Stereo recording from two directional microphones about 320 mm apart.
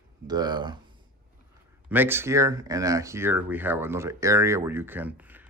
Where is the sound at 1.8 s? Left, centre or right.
Centre.